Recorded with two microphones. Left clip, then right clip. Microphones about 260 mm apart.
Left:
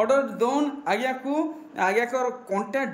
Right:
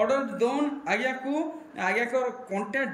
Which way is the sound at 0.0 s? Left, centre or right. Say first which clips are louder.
Left 3 dB; centre.